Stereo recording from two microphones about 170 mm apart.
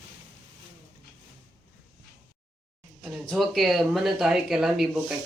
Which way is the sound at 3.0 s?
Centre (ahead or behind).